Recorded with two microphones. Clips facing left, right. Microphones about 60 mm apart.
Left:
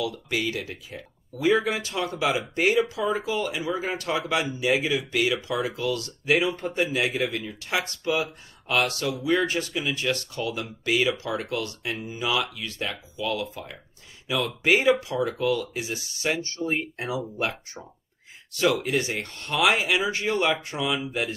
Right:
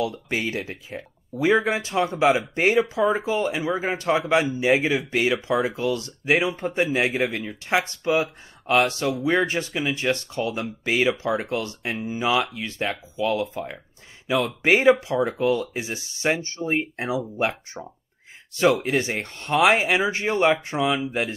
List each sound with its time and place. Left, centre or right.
0.0 s speech: right